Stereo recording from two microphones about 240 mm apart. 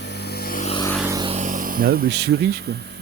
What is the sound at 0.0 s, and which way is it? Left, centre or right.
Vehicle, left.